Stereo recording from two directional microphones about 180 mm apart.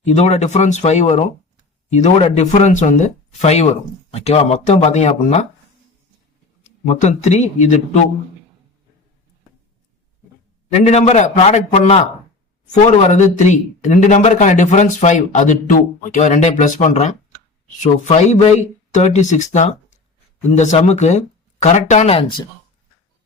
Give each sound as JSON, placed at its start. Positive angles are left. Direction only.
{"t": 0.1, "sound": "speech", "side_deg": 40}
{"t": 6.7, "sound": "speech", "side_deg": 40}
{"t": 10.7, "sound": "speech", "side_deg": 35}